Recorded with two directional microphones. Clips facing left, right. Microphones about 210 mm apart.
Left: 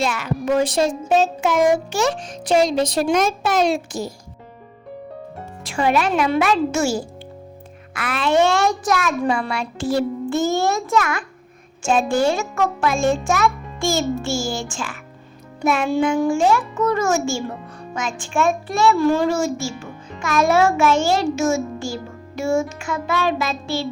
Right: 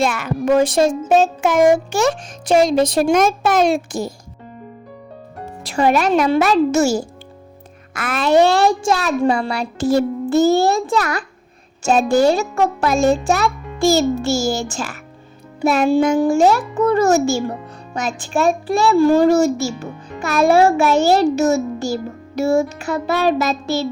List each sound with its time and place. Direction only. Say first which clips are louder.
0.0 s a child's voice: right 4 dB; 50° right (ahead or behind)
5.6 s a child's voice: right 3 dB; 40° right (ahead or behind)